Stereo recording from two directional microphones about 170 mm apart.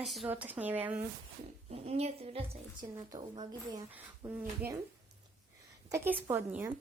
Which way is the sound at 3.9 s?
10° right (ahead or behind).